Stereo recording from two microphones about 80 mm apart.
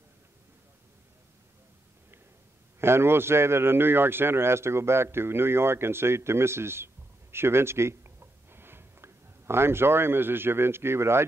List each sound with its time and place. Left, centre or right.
2.8 s speech: right